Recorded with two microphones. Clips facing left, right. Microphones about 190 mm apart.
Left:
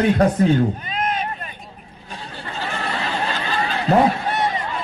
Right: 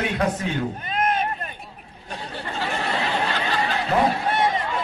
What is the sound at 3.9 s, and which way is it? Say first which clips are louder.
Speech: left 6 dB; 35° left (ahead or behind).